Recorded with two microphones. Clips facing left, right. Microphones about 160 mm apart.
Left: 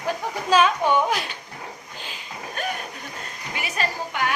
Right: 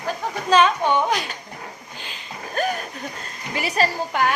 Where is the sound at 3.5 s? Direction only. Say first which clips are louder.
Right 6 dB; 35° right (ahead or behind).